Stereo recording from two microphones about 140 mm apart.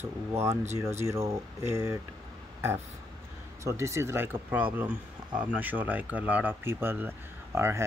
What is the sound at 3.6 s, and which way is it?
Speech, 20° right (ahead or behind).